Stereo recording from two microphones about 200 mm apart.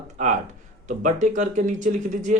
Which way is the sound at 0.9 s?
40° right (ahead or behind).